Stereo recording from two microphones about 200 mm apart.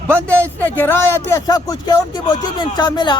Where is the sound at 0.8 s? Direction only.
15° left (ahead or behind).